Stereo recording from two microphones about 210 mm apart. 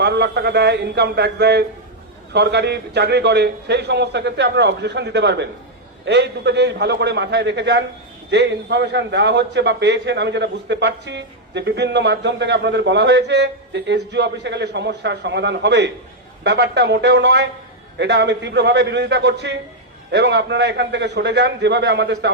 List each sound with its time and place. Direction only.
0.0 s a man's voice: 50° right (ahead or behind)